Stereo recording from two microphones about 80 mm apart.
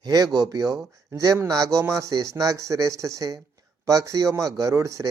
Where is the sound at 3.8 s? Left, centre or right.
Right.